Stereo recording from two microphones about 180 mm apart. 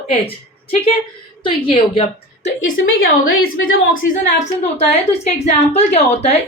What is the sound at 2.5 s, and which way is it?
Speech, 90° left.